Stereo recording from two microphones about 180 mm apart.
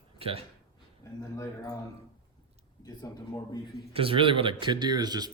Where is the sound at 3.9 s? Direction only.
30° right (ahead or behind).